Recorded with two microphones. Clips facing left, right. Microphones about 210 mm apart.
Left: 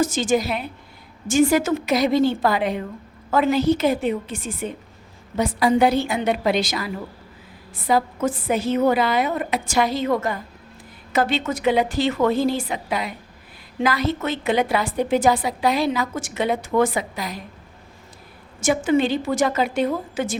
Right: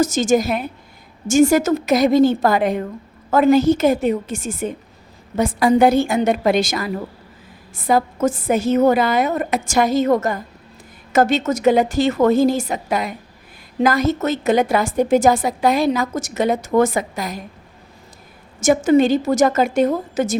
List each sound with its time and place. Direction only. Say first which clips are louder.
0.0 s a woman's voice: right 4 dB; 45° right (ahead or behind)
18.6 s a woman's voice: right 5 dB; 45° right (ahead or behind)